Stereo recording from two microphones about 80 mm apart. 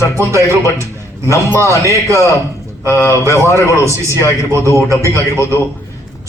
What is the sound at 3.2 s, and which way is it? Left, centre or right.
Speech, right.